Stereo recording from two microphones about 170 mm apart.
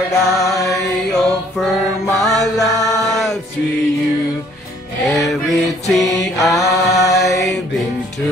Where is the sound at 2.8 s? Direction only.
20° left (ahead or behind).